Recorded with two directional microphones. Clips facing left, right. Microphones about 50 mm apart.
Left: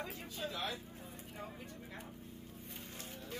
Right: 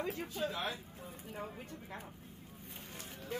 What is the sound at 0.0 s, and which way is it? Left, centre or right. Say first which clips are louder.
Speech: right 5 dB; right.